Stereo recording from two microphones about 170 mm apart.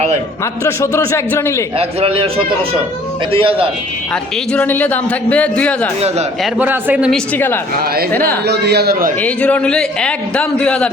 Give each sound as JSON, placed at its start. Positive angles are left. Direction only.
{"t": 0.6, "sound": "a man's voice", "side_deg": 15}
{"t": 1.8, "sound": "speech", "side_deg": -35}
{"t": 3.3, "sound": "speech", "side_deg": -30}
{"t": 4.1, "sound": "a man's voice", "side_deg": 10}
{"t": 6.4, "sound": "a man's voice", "side_deg": -10}
{"t": 7.1, "sound": "a man's voice", "side_deg": 10}
{"t": 8.4, "sound": "speech", "side_deg": -75}
{"t": 9.2, "sound": "a man's voice", "side_deg": 10}